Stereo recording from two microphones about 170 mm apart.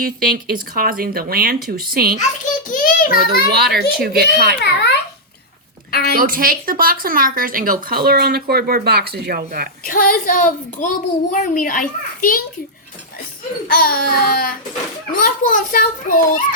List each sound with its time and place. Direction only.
0.0 s speech: 60° right (ahead or behind)
2.6 s a sound: 50° left (ahead or behind)
3.2 s speech: 65° right (ahead or behind)
5.9 s a woman's voice: 65° left (ahead or behind)
6.1 s speech: 55° right (ahead or behind)
9.8 s a woman's voice: 55° left (ahead or behind)
13.7 s a sound: 60° left (ahead or behind)
15.2 s a woman's voice: 50° left (ahead or behind)